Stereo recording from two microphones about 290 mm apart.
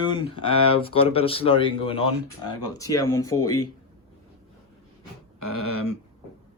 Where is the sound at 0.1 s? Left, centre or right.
Centre.